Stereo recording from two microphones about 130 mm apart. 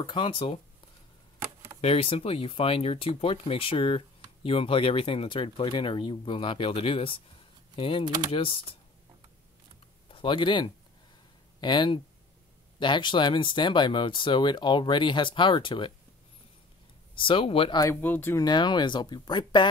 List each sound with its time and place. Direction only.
0.0 s speech: 40° left (ahead or behind)
1.8 s speech: 50° left (ahead or behind)
10.0 s speech: 40° left (ahead or behind)
17.1 s speech: 40° left (ahead or behind)
18.0 s speech: 15° left (ahead or behind)
18.4 s speech: 35° left (ahead or behind)